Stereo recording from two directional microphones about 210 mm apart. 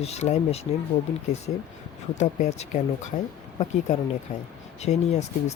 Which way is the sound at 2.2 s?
35° left (ahead or behind).